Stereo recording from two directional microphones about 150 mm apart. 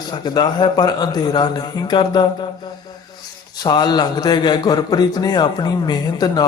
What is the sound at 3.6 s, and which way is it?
A man's voice, 25° left (ahead or behind).